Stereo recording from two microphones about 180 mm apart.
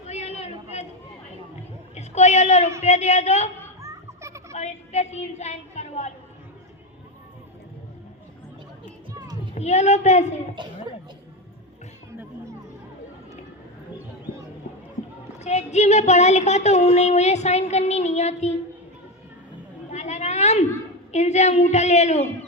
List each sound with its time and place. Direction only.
0.1 s a sound: 35° left (ahead or behind)
2.0 s a sound: 40° left (ahead or behind)
2.8 s speech: 40° left (ahead or behind)
3.8 s children playing: 15° right (ahead or behind)
4.5 s a woman's voice: 40° left (ahead or behind)
9.1 s a sound: 20° right (ahead or behind)
9.6 s speech: 40° left (ahead or behind)
15.4 s speech: 40° left (ahead or behind)
19.9 s cat: 40° left (ahead or behind)
21.1 s speech: 40° left (ahead or behind)